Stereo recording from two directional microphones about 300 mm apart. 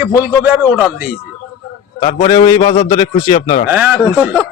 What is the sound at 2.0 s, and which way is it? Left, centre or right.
A man's voice, centre.